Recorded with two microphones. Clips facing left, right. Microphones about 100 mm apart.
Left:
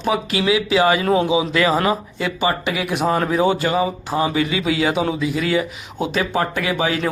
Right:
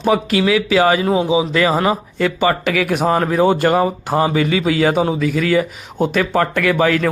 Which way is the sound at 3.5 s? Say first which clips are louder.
Right 4 dB; 55° right (ahead or behind).